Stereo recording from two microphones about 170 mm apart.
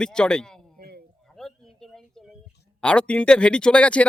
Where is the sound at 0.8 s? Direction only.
65° right (ahead or behind).